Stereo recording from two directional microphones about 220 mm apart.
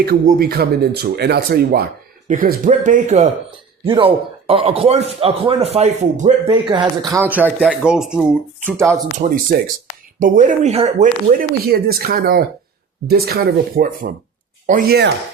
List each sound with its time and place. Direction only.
0.0 s speech: 45° right (ahead or behind)
6.5 s speech: 20° right (ahead or behind)
7.4 s speech: centre (ahead or behind)
9.2 s speech: 40° right (ahead or behind)